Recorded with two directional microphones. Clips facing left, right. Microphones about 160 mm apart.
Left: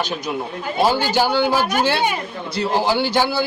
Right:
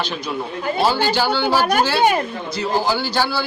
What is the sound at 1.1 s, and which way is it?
Speech, 15° left (ahead or behind).